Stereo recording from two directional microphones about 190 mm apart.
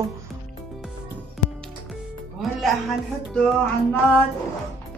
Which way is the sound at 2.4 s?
Centre (ahead or behind).